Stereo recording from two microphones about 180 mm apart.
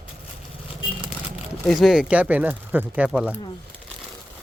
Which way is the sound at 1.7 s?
Centre (ahead or behind).